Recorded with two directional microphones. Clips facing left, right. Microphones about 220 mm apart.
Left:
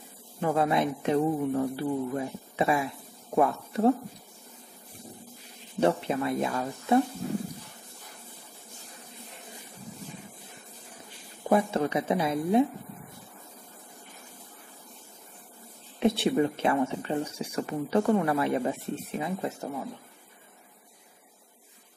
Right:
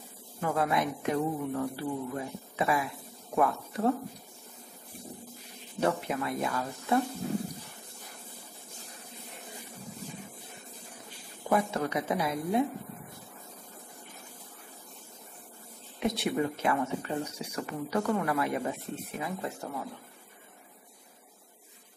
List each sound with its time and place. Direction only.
0.4 s speech: 25° left (ahead or behind)
5.8 s speech: 25° left (ahead or behind)
11.4 s speech: 25° left (ahead or behind)
16.0 s speech: 30° left (ahead or behind)